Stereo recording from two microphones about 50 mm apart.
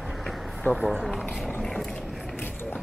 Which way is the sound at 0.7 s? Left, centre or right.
Left.